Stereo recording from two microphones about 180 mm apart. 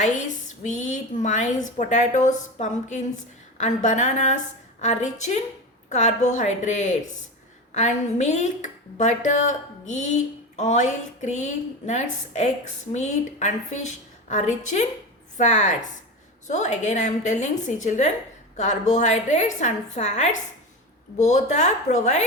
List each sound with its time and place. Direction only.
0.6 s a woman's voice: 40° left (ahead or behind)